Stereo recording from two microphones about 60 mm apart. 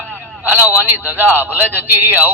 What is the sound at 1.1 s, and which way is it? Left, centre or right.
A man's voice, right.